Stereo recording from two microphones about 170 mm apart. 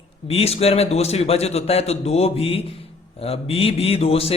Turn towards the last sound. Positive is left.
turn(degrees=35)  # may be behind; listen again after turning